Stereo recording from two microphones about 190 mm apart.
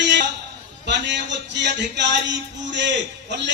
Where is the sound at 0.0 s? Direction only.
65° right (ahead or behind).